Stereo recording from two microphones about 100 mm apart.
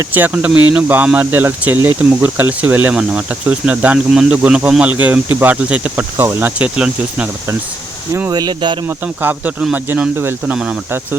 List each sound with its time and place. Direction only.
0.1 s speech: 15° right (ahead or behind)
6.7 s speech: 10° right (ahead or behind)
8.3 s speech: 45° right (ahead or behind)
8.9 s speech: 20° right (ahead or behind)
10.5 s speech: 10° right (ahead or behind)